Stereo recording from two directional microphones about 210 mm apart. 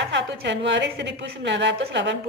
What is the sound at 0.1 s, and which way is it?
A woman's voice, 55° right (ahead or behind).